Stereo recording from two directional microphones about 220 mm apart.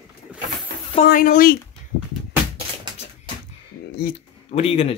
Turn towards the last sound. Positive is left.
turn(degrees=25)  # may be behind; listen again after turning